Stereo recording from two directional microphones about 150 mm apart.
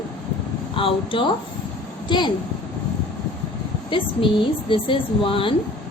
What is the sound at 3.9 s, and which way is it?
A woman's voice, 35° left (ahead or behind).